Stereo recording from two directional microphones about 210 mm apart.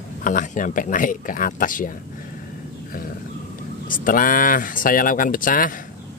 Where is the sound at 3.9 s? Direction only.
40° left (ahead or behind).